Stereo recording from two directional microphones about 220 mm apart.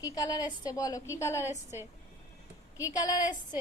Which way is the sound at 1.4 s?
10° right (ahead or behind).